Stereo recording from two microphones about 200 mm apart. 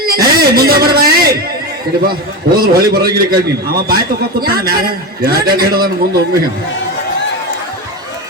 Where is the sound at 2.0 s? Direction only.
50° right (ahead or behind).